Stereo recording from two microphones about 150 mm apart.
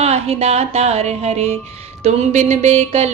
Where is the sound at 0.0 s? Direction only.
45° right (ahead or behind).